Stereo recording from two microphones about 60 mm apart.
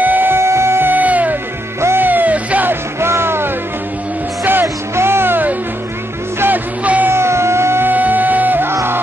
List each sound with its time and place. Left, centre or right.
0.0 s music: right
1.8 s music: right
2.0 s music: right
2.7 s music: right
4.9 s music: right
7.1 s a sound: right
7.9 s music: right